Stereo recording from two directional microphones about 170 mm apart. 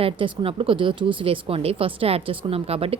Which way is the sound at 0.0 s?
30° right (ahead or behind).